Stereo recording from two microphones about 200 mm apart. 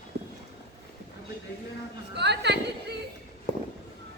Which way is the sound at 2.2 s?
55° right (ahead or behind).